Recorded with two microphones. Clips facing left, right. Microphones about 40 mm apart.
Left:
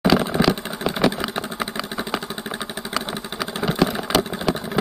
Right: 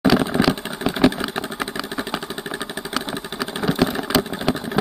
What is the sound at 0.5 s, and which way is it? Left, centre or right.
Vehicle, centre.